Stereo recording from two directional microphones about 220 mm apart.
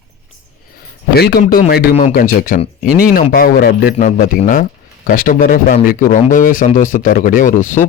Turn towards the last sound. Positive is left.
turn(degrees=35)  # may be behind; listen again after turning